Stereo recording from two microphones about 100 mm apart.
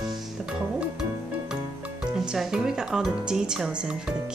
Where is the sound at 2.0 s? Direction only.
10° right (ahead or behind).